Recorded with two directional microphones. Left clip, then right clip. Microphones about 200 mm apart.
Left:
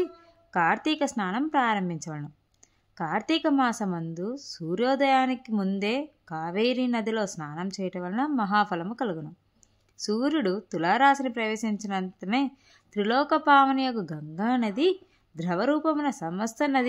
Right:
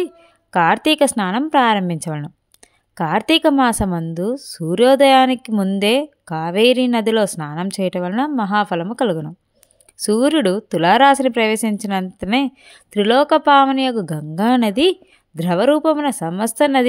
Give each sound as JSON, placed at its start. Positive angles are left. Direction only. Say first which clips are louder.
{"t": 0.0, "sound": "a woman's voice", "louder": "right 6 dB", "side_deg": -45}